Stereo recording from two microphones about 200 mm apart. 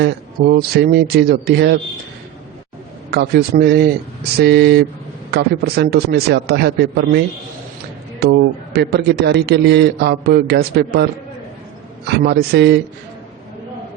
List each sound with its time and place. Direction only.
0.4 s a man's voice: 50° right (ahead or behind)
3.1 s a man's voice: 50° right (ahead or behind)
8.2 s a man's voice: 55° right (ahead or behind)